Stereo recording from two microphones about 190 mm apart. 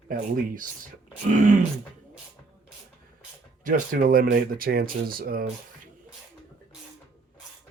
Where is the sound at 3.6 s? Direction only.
45° right (ahead or behind).